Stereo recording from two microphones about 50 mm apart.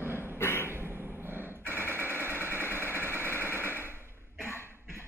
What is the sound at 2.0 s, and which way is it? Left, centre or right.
Sewing machine, right.